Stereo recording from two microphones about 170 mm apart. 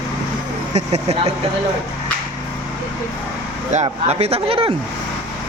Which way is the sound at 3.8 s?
35° right (ahead or behind).